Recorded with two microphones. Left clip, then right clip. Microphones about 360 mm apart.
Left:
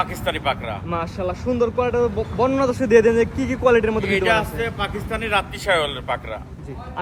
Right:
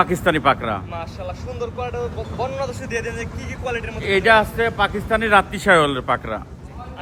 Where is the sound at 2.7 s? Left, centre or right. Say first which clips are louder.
Left 12 dB; centre.